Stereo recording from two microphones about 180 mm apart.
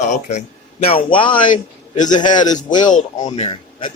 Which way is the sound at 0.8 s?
30° left (ahead or behind).